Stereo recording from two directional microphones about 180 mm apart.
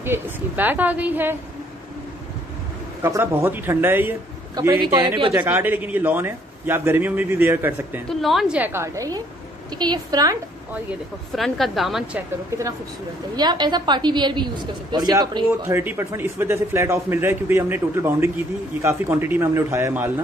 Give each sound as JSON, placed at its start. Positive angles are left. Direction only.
{"t": 0.0, "sound": "a man's voice", "side_deg": -10}
{"t": 3.0, "sound": "a man's voice", "side_deg": -15}
{"t": 4.6, "sound": "a woman's voice", "side_deg": -20}
{"t": 5.3, "sound": "a man's voice", "side_deg": -10}
{"t": 8.1, "sound": "a man's voice", "side_deg": 0}
{"t": 10.7, "sound": "a man's voice", "side_deg": -10}
{"t": 13.4, "sound": "a woman's voice", "side_deg": -25}
{"t": 15.6, "sound": "a man's voice", "side_deg": -10}